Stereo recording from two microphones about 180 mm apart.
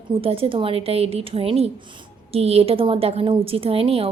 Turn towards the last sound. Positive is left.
turn(degrees=-30)  # may be behind; listen again after turning